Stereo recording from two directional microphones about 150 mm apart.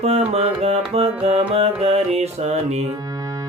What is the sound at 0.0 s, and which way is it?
Music, 40° right (ahead or behind).